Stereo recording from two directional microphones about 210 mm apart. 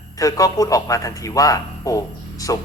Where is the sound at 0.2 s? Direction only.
15° left (ahead or behind).